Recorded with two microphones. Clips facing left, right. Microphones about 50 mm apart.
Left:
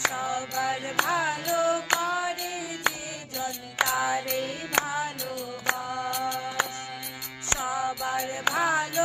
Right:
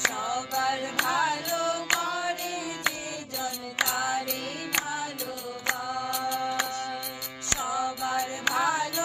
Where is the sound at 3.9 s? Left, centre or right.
Left.